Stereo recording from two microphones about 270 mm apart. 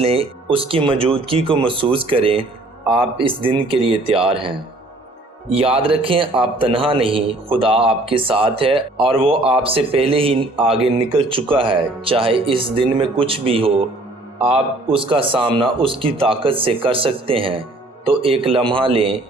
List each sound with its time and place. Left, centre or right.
0.0 s a man's voice: right
14.9 s a man's voice: centre